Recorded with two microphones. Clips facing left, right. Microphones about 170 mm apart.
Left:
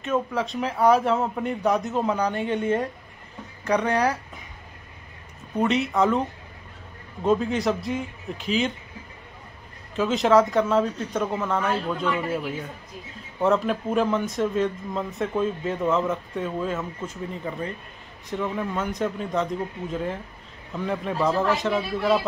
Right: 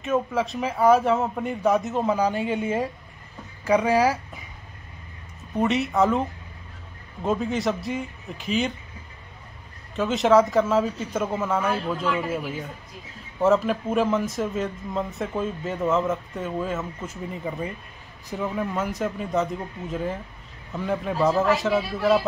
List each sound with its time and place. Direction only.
0.0 s speech: centre (ahead or behind)
5.6 s speech: centre (ahead or behind)
7.2 s speech: centre (ahead or behind)
9.9 s speech: centre (ahead or behind)